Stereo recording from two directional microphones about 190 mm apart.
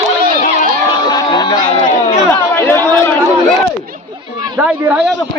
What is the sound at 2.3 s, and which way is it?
Chatter, 10° left (ahead or behind).